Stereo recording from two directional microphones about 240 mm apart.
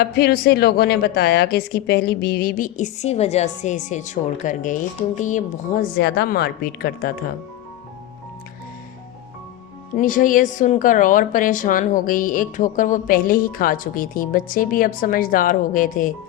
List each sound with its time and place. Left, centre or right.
0.0 s a woman's voice: left
9.9 s a woman's voice: left